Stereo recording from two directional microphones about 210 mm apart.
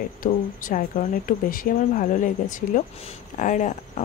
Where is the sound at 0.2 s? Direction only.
40° left (ahead or behind).